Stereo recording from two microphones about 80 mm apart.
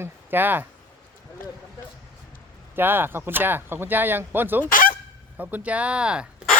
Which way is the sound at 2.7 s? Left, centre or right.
Right.